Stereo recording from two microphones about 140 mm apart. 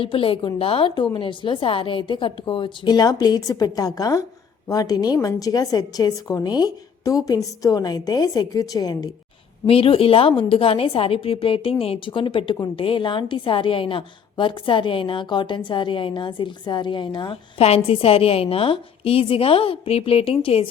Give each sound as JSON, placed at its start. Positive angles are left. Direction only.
{"t": 0.0, "sound": "a woman's voice", "side_deg": 40}
{"t": 9.6, "sound": "a woman's voice", "side_deg": 40}
{"t": 17.6, "sound": "a woman's voice", "side_deg": 45}